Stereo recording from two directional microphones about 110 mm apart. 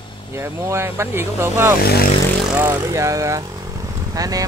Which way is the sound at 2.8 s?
30° right (ahead or behind).